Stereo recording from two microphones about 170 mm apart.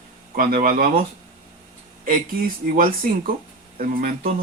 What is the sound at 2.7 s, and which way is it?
Speech, 55° right (ahead or behind).